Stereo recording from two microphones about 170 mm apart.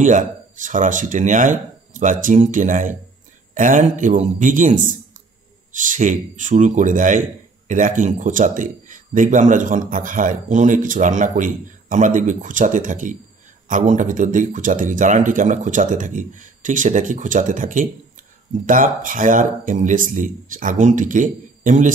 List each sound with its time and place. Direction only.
0.0 s a man's voice: 50° right (ahead or behind)